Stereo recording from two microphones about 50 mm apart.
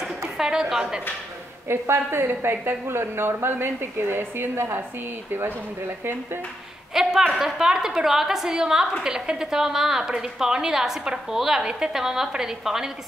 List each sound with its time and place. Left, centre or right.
0.4 s a woman's voice: centre
1.7 s a woman's voice: right
6.9 s a woman's voice: centre